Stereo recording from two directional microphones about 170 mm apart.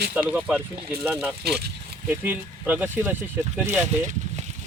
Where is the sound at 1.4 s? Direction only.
70° right (ahead or behind).